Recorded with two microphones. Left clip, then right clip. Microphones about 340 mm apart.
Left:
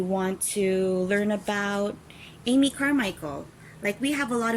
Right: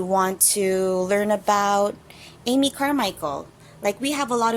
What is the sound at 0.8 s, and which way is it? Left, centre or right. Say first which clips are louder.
Speech: right 4 dB; right.